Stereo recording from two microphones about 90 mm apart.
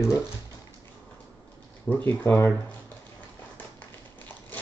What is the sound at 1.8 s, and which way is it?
Speech, 20° left (ahead or behind).